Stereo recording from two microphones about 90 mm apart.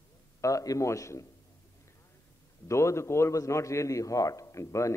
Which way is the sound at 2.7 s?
30° left (ahead or behind).